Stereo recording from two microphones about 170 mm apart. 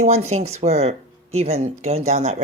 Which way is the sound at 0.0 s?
40° right (ahead or behind).